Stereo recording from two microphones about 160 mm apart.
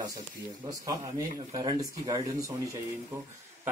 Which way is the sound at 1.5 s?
25° right (ahead or behind).